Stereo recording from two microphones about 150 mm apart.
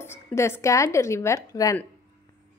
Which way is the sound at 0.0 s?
15° left (ahead or behind).